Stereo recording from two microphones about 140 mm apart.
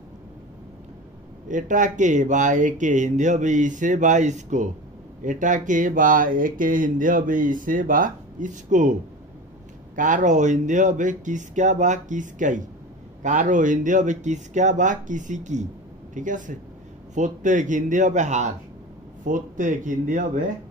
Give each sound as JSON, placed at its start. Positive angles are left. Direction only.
{"t": 1.5, "sound": "speech", "side_deg": -65}
{"t": 9.9, "sound": "speech", "side_deg": -65}
{"t": 19.2, "sound": "speech", "side_deg": -70}